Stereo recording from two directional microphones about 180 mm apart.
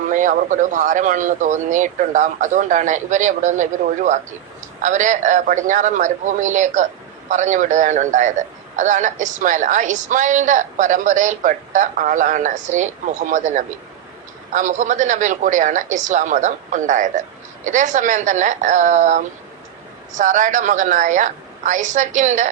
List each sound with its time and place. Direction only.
0.1 s a man's voice: 45° right (ahead or behind)